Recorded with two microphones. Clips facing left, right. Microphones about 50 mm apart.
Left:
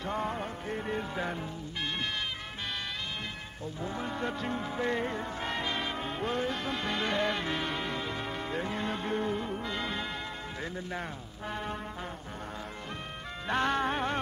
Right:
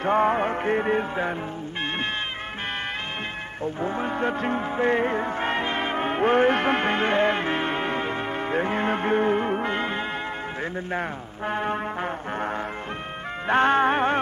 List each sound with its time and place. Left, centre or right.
0.0 s music: right
1.1 s music: right
3.6 s music: right
10.6 s speech: right
13.5 s music: right